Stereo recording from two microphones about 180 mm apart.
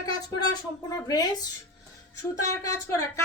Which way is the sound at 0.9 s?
20° left (ahead or behind).